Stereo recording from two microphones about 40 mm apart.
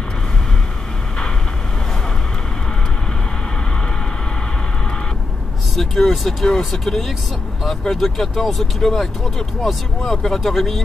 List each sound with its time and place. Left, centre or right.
5.8 s speech: centre
10.1 s speech: centre